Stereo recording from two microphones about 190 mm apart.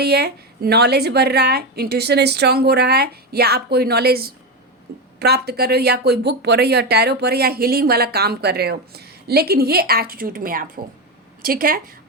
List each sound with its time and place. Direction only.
0.0 s speech: 60° right (ahead or behind)
4.9 s a sound: 60° right (ahead or behind)
5.2 s a woman's voice: 60° right (ahead or behind)